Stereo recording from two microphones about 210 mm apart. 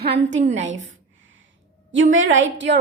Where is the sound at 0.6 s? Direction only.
65° right (ahead or behind).